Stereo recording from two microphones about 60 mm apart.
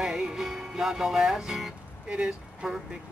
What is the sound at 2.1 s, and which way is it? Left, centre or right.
Speech, centre.